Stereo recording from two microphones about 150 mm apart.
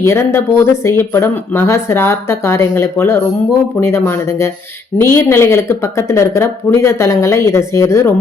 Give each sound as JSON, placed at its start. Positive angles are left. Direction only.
{"t": 0.0, "sound": "speech", "side_deg": 15}